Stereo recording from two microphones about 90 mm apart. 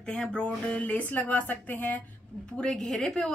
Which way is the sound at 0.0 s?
10° left (ahead or behind).